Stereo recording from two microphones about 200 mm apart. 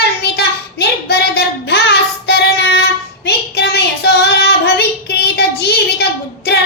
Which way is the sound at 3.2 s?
55° left (ahead or behind).